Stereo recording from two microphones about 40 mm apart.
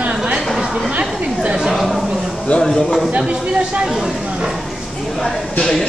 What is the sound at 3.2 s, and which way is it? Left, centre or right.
Speech, right.